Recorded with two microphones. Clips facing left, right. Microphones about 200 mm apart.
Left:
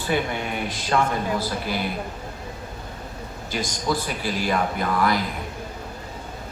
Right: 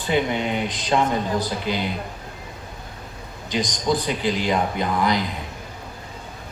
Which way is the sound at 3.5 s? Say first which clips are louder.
Right 3 dB; 20° right (ahead or behind).